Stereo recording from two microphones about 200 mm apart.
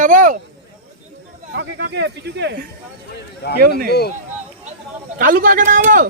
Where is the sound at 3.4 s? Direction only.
55° left (ahead or behind).